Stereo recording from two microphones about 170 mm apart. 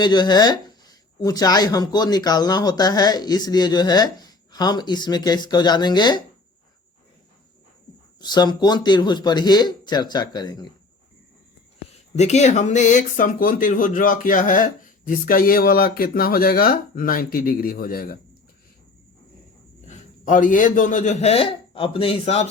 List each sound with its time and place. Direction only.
0.0 s speech: 25° left (ahead or behind)
8.2 s speech: 25° left (ahead or behind)
12.1 s speech: 40° left (ahead or behind); by 18.2 s 60° left (ahead or behind)
19.9 s a man's voice: 50° left (ahead or behind)